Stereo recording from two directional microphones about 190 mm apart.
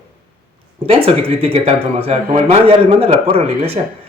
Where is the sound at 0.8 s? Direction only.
30° right (ahead or behind).